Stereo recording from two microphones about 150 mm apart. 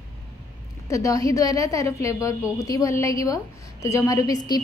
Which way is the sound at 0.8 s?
20° left (ahead or behind).